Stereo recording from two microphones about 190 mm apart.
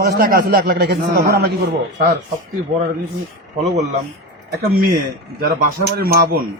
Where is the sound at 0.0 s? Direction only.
55° right (ahead or behind).